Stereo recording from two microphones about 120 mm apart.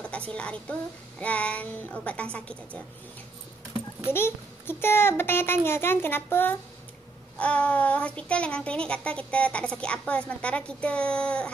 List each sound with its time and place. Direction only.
0.0 s a woman's voice: 10° left (ahead or behind)
4.1 s a child's voice: 20° left (ahead or behind)